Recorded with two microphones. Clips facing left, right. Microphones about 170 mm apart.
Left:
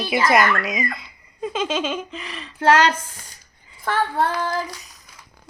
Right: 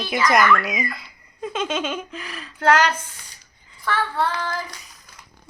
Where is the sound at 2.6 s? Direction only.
30° left (ahead or behind).